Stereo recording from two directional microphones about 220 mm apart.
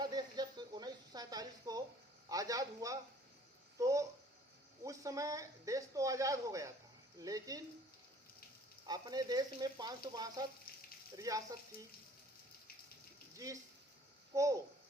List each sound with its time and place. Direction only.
0.0 s a sound: 20° right (ahead or behind)
2.3 s a man's voice: 15° right (ahead or behind)
3.8 s a sound: 15° right (ahead or behind)
7.2 s frying: 15° right (ahead or behind)
8.9 s frying: 20° right (ahead or behind)
10.7 s frying: 40° left (ahead or behind)
11.2 s frying: 15° right (ahead or behind)
13.3 s speech: 15° right (ahead or behind)
14.3 s frying: 15° right (ahead or behind)